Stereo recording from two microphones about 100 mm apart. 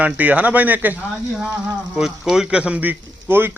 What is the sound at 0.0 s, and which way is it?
A man's voice, 15° right (ahead or behind).